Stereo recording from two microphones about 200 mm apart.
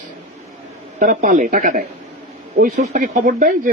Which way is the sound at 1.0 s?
40° right (ahead or behind).